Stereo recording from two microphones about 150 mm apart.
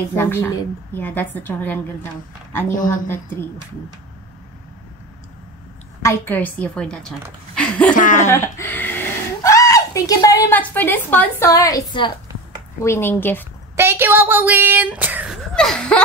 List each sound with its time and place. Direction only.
0.1 s a woman's voice: 15° left (ahead or behind)
2.7 s speech: 60° left (ahead or behind)
3.1 s a woman's voice: 15° left (ahead or behind)
6.0 s a woman's voice: 15° left (ahead or behind)
7.9 s speech: 60° left (ahead or behind)
8.3 s a sound: 20° left (ahead or behind)
10.5 s a woman's voice: 10° left (ahead or behind); by 12.1 s 30° left (ahead or behind)
12.8 s a woman's voice: 15° left (ahead or behind)
13.7 s speech: 15° right (ahead or behind)
15.5 s a sound: 5° left (ahead or behind)